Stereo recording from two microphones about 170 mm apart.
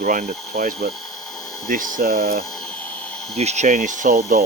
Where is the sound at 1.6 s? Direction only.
50° right (ahead or behind).